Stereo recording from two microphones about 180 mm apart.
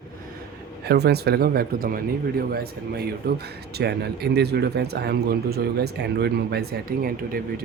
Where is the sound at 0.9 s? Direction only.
65° right (ahead or behind).